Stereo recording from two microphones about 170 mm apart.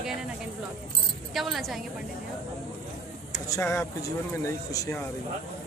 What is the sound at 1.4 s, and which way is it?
Speech, centre (ahead or behind).